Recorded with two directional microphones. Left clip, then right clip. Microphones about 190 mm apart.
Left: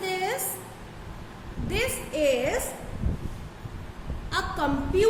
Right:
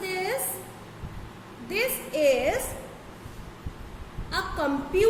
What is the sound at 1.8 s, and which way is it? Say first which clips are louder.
Speech: right 1 dB; 15° left (ahead or behind).